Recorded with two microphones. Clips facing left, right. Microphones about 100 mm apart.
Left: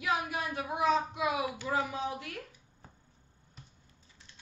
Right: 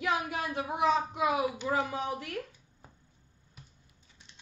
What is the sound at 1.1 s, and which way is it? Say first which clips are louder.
Speech: right 3 dB; 35° right (ahead or behind).